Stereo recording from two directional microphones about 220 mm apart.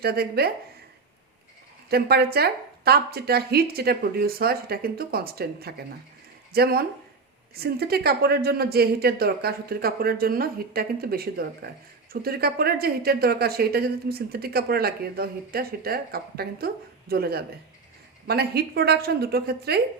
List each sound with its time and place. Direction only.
0.0 s a woman's voice: 45° right (ahead or behind)
1.9 s a woman's voice: 45° right (ahead or behind)